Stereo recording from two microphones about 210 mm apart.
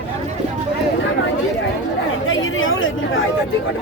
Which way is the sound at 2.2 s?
70° left (ahead or behind).